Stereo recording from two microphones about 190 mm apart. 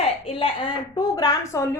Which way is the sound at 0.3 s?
30° left (ahead or behind).